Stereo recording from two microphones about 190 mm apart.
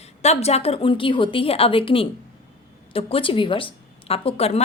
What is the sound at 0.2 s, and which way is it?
A woman's voice, 35° left (ahead or behind).